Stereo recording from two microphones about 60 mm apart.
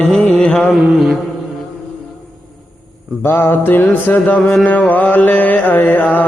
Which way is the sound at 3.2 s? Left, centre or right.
Left.